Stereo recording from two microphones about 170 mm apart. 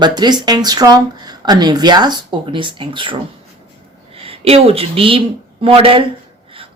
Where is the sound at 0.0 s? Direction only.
25° right (ahead or behind).